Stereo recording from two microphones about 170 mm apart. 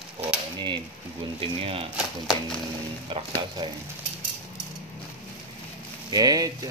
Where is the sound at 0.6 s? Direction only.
30° right (ahead or behind).